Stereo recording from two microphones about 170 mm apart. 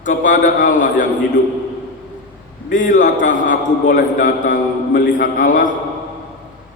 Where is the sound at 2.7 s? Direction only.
50° left (ahead or behind).